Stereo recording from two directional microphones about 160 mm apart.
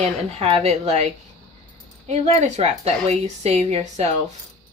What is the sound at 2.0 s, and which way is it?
Speech, 45° right (ahead or behind).